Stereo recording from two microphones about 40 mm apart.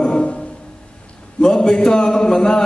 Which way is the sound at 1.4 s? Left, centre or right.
Centre.